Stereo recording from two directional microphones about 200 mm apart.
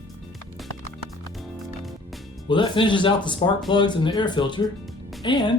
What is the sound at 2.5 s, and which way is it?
Speech, 25° left (ahead or behind).